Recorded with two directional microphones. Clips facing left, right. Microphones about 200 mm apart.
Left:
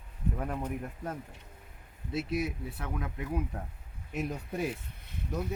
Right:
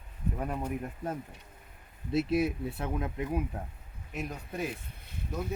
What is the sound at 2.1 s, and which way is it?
Speech, 25° right (ahead or behind).